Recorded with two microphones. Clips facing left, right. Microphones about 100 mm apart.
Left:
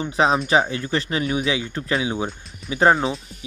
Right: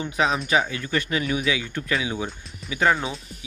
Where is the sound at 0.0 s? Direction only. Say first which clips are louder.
Left 4 dB; 30° left (ahead or behind).